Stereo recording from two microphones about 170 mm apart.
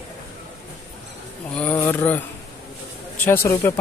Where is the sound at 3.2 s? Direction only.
15° left (ahead or behind).